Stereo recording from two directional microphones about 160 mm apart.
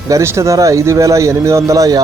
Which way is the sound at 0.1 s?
15° right (ahead or behind).